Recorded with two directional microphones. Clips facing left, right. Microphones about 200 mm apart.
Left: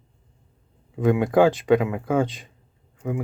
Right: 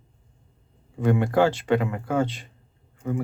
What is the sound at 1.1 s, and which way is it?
Speech, 15° left (ahead or behind).